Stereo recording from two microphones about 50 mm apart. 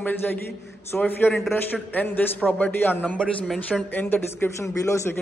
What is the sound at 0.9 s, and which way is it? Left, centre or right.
A man's voice, left.